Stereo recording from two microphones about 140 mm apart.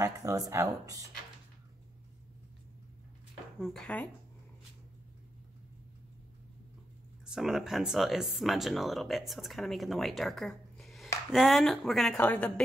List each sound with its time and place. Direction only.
0.0 s speech: 25° right (ahead or behind)
3.5 s speech: centre (ahead or behind)
7.2 s a woman's voice: 5° right (ahead or behind)